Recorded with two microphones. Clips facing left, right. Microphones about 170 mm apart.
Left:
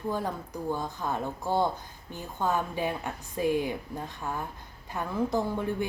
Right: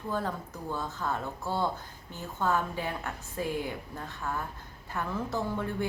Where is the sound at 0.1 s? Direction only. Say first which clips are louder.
Even; 15° left (ahead or behind).